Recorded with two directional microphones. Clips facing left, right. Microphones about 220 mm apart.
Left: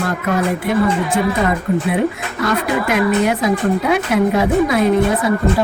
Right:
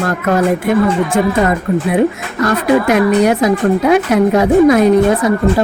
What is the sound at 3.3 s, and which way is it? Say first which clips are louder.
Speech: right 4 dB; 45° right (ahead or behind).